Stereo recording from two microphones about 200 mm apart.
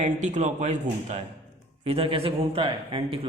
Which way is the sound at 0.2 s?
35° right (ahead or behind).